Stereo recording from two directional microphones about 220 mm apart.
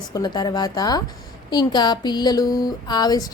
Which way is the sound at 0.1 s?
20° left (ahead or behind).